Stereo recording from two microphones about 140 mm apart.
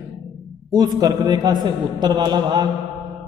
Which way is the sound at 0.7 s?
25° right (ahead or behind).